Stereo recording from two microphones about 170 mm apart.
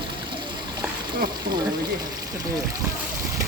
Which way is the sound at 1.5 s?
55° right (ahead or behind).